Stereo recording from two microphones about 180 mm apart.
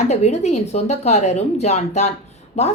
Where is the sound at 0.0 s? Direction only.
40° left (ahead or behind).